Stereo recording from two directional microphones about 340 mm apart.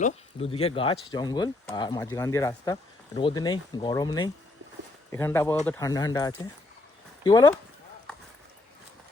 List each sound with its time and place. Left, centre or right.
0.0 s speech: centre